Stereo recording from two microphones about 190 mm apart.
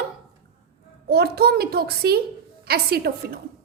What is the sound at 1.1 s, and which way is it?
A woman's voice, 55° right (ahead or behind).